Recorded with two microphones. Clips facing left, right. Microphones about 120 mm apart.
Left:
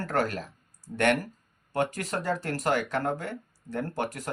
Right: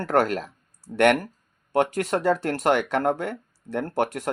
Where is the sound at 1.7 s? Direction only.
60° right (ahead or behind).